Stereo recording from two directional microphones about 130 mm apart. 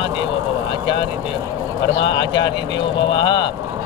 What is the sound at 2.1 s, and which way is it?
Speech, 40° left (ahead or behind).